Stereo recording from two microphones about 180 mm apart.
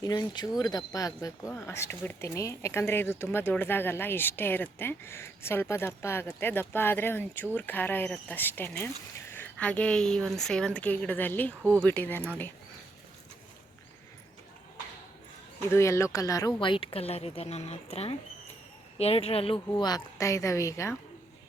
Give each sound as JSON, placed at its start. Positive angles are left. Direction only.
{"t": 0.0, "sound": "speech", "side_deg": 20}
{"t": 15.7, "sound": "speech", "side_deg": 15}
{"t": 19.7, "sound": "speech", "side_deg": 20}